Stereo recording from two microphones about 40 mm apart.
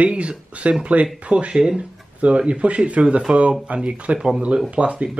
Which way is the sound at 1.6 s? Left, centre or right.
Centre.